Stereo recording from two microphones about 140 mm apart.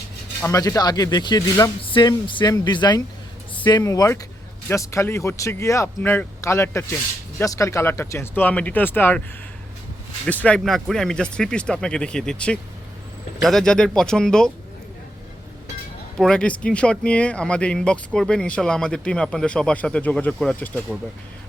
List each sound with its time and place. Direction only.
0.4 s speech: 25° left (ahead or behind)
1.8 s speech: 35° left (ahead or behind); by 9.2 s 15° left (ahead or behind)
10.2 s speech: 10° left (ahead or behind)
16.1 s speech: 5° left (ahead or behind)